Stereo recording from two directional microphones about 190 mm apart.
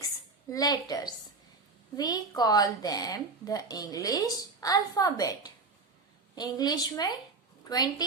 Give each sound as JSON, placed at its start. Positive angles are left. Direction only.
{"t": 0.5, "sound": "speech", "side_deg": 20}